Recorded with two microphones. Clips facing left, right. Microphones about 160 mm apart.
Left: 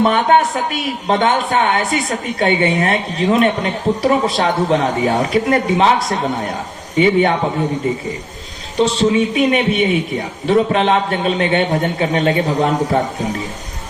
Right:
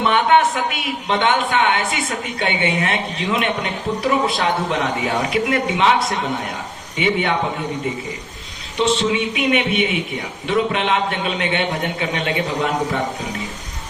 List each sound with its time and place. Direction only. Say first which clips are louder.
0.0 s speech: left 2 dB; 40° left (ahead or behind)
8.8 s speech: left 4 dB; 40° left (ahead or behind)